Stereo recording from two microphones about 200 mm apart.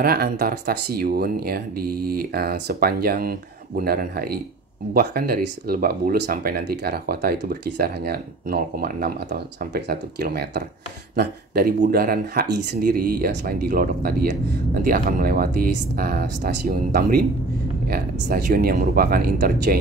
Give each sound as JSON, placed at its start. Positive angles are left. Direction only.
{"t": 0.0, "sound": "speech", "side_deg": -50}